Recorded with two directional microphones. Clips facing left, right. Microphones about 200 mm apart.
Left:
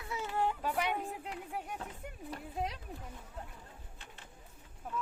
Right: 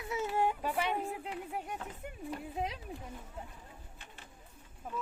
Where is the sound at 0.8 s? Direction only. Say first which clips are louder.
Right 1 dB; centre (ahead or behind).